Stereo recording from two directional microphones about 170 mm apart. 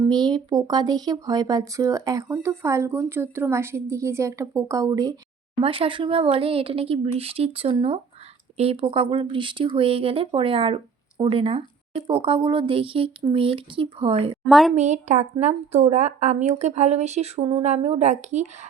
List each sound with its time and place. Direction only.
0.1 s speech: 25° right (ahead or behind)
5.6 s a woman's voice: 30° right (ahead or behind)
14.4 s a woman's voice: centre (ahead or behind)
14.8 s a woman's voice: 45° right (ahead or behind)